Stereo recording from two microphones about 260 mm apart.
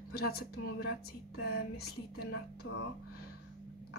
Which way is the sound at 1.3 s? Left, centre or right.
Left.